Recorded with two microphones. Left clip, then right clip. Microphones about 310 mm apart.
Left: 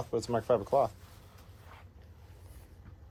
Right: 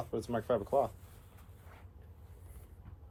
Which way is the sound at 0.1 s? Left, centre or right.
Left.